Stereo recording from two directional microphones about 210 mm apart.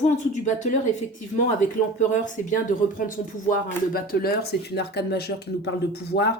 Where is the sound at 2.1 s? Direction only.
40° left (ahead or behind).